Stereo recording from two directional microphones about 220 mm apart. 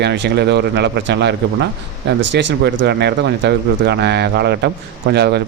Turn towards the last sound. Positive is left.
turn(degrees=-50)  # may be behind; listen again after turning